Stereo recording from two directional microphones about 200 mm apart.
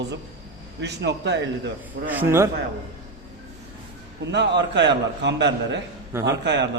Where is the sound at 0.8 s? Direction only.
55° right (ahead or behind).